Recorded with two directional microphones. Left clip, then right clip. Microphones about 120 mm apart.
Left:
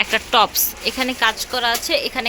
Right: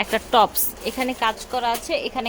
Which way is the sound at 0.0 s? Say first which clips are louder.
Left 2 dB; 30° right (ahead or behind).